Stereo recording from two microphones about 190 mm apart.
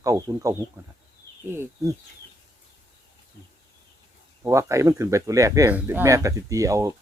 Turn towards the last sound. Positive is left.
turn(degrees=-15)  # may be behind; listen again after turning